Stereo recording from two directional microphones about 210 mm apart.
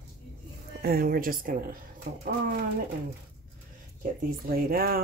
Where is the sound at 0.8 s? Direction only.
45° right (ahead or behind).